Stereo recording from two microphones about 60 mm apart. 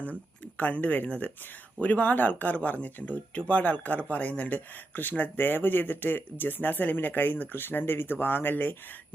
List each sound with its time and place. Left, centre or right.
0.0 s speech: left